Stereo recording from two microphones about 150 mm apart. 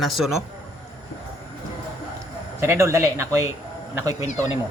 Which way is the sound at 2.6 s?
20° right (ahead or behind).